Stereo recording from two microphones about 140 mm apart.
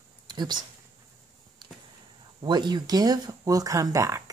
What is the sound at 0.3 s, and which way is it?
Speech, 30° right (ahead or behind).